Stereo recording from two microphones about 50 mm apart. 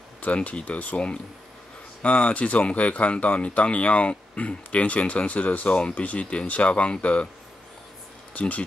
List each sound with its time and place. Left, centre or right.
0.2 s speech: left
8.4 s speech: left